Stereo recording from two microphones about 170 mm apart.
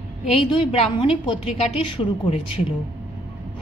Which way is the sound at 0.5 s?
35° left (ahead or behind).